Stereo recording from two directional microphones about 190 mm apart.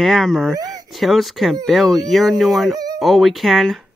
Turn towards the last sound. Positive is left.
turn(degrees=0)  # may be behind; listen again after turning